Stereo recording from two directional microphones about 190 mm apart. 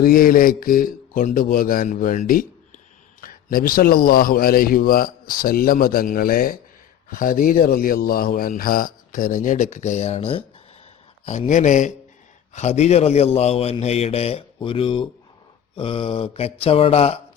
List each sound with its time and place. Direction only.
0.0 s a man's voice: 50° left (ahead or behind); by 17.2 s 30° left (ahead or behind)